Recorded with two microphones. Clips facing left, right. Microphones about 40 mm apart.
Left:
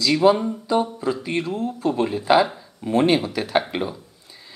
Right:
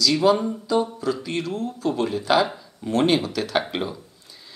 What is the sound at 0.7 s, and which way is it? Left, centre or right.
Speech, left.